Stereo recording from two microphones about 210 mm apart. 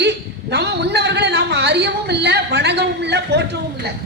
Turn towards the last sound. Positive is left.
turn(degrees=-50)  # may be behind; listen again after turning